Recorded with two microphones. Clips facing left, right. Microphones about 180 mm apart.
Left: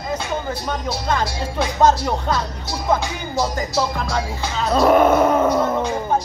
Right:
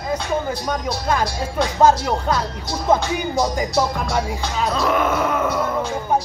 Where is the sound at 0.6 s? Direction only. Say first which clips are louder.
Right 1 dB; 10° right (ahead or behind).